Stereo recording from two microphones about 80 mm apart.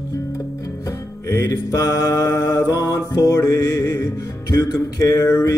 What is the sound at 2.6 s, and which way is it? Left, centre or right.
Music, left.